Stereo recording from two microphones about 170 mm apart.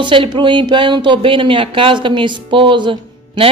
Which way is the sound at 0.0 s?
30° right (ahead or behind).